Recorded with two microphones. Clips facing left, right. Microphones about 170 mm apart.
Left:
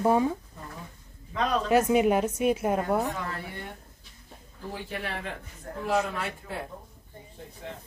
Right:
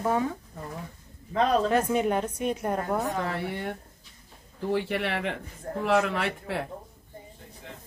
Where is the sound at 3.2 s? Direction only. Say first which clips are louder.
Right 6 dB; 70° right (ahead or behind).